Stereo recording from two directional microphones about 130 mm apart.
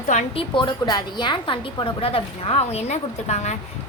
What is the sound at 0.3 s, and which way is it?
A woman's voice, 40° left (ahead or behind).